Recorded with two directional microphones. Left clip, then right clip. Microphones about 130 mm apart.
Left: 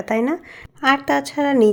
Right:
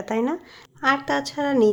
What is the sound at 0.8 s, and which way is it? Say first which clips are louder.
Speech: left 4 dB; 30° left (ahead or behind).